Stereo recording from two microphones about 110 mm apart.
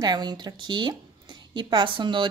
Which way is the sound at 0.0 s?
40° right (ahead or behind).